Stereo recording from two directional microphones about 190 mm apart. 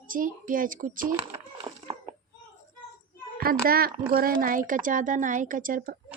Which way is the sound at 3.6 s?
50° right (ahead or behind).